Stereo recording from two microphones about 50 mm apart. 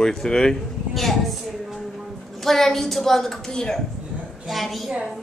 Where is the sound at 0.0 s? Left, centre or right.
Centre.